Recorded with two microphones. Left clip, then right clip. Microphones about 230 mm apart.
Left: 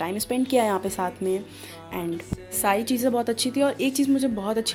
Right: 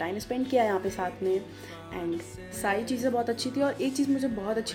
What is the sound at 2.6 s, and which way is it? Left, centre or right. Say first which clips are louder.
A woman's voice: left 5 dB; left.